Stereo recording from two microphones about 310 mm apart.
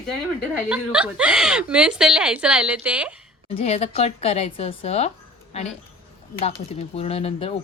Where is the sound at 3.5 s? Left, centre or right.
Centre.